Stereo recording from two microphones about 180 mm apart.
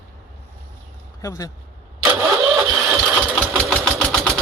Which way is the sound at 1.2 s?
20° left (ahead or behind).